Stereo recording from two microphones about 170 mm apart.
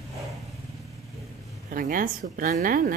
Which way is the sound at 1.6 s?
55° right (ahead or behind).